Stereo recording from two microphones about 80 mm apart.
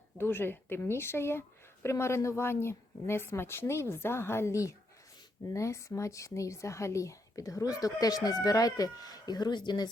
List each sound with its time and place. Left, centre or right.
0.2 s speech: left